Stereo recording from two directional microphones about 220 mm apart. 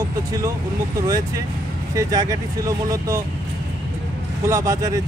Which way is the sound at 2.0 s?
15° right (ahead or behind).